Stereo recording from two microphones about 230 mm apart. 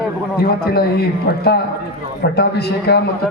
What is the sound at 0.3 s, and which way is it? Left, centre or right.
A man's voice, left.